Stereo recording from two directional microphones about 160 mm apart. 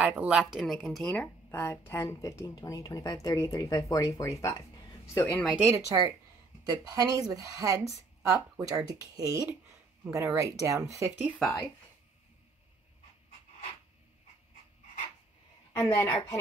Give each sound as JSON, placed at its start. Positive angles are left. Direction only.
{"t": 0.0, "sound": "a woman's voice", "side_deg": -5}
{"t": 5.4, "sound": "a woman's voice", "side_deg": -5}
{"t": 6.6, "sound": "speech", "side_deg": -25}
{"t": 11.3, "sound": "speech", "side_deg": 10}
{"t": 15.7, "sound": "a woman's voice", "side_deg": 15}
{"t": 16.1, "sound": "speech", "side_deg": 30}